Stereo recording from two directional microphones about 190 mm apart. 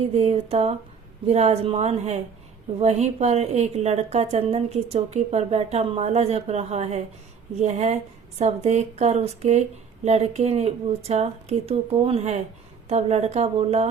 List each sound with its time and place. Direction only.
0.1 s a woman's voice: 35° right (ahead or behind)